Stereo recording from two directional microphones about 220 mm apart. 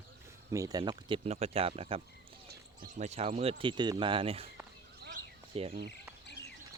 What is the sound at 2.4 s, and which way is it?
Speech, 35° right (ahead or behind).